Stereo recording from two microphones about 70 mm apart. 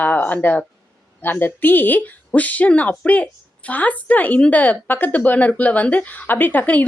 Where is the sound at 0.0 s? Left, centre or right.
Left.